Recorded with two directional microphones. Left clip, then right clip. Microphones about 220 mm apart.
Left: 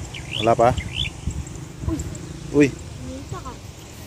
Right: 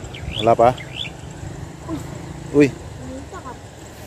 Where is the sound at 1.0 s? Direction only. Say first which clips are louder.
Left 2 dB; 40° right (ahead or behind).